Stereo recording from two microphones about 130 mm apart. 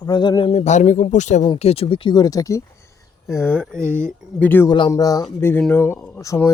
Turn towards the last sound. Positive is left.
turn(degrees=5)  # may be behind; listen again after turning